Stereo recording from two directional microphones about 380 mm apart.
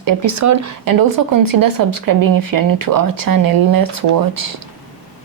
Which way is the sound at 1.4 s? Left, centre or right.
Right.